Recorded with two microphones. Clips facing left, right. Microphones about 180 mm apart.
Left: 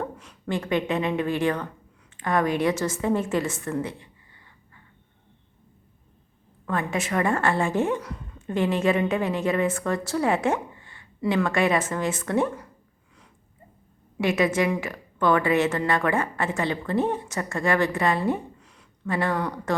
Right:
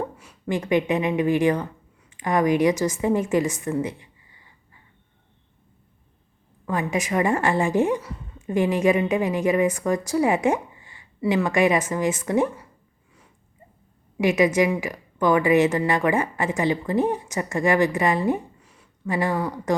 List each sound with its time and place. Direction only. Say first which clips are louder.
0.0 s a woman's voice: right 2 dB; 10° right (ahead or behind)
6.7 s a woman's voice: right 2 dB; 15° right (ahead or behind)
7.9 s a woman's voice: right 1 dB; 5° right (ahead or behind)
14.2 s a woman's voice: right 3 dB; 15° right (ahead or behind)